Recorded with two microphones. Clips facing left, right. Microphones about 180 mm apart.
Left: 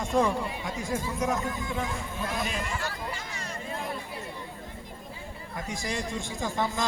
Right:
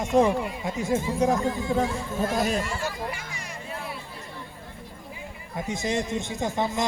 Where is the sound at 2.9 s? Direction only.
10° right (ahead or behind).